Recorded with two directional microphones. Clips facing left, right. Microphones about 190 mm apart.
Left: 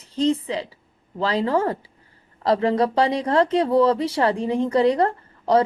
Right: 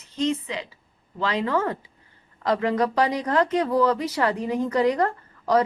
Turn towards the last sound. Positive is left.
turn(degrees=30)  # may be behind; listen again after turning